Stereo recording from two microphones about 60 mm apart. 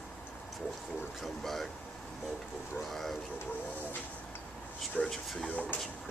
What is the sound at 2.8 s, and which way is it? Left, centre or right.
Speech, centre.